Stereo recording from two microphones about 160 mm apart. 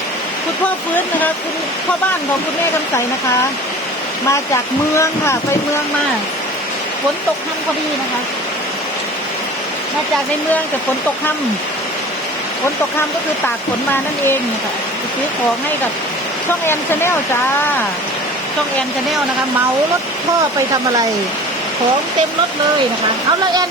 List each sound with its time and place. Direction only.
4.9 s speech: 15° left (ahead or behind)
16.6 s speech: 15° left (ahead or behind)